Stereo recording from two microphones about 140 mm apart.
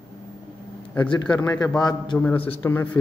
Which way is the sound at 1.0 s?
35° left (ahead or behind).